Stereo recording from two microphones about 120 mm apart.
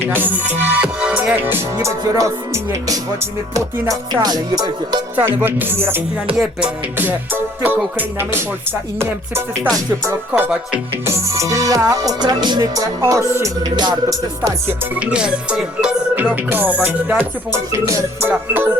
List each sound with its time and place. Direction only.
0.0 s music: 15° right (ahead or behind); by 5.0 s 40° right (ahead or behind)
5.1 s music: 15° right (ahead or behind)
11.0 s music: 25° right (ahead or behind)
14.9 s music: 10° right (ahead or behind)
17.7 s music: 25° right (ahead or behind)